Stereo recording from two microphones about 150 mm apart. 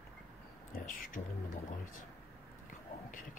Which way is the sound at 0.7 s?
65° left (ahead or behind).